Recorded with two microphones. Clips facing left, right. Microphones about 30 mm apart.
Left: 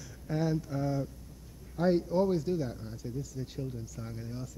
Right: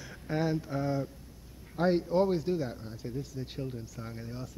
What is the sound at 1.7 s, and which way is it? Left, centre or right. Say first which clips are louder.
Speech: right 1 dB; right.